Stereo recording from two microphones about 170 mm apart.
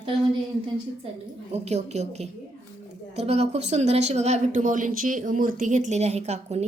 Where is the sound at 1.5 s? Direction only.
40° right (ahead or behind).